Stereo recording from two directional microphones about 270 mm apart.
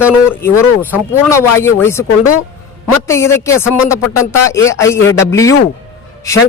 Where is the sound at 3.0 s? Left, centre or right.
Centre.